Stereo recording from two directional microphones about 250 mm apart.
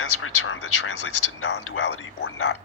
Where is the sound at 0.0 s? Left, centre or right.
Left.